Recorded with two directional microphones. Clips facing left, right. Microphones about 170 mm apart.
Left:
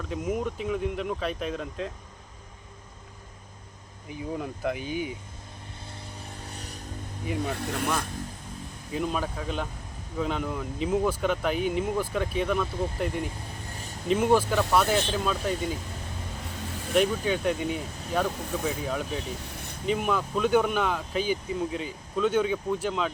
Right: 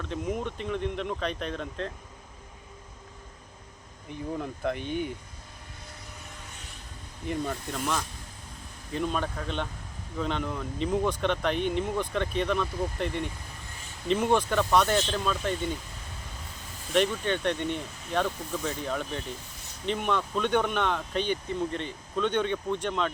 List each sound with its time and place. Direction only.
0.0 s speech: 5° left (ahead or behind)
4.1 s speech: 5° left (ahead or behind)
6.4 s vehicle: 35° left (ahead or behind)
7.5 s speech: 75° left (ahead or behind)
8.9 s speech: 5° left (ahead or behind)
16.9 s speech: 5° left (ahead or behind)